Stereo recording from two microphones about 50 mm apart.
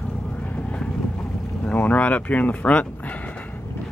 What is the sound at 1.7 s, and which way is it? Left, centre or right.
Speech, left.